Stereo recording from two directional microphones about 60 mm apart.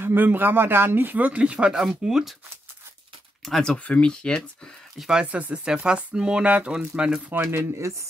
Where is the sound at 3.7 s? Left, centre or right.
Centre.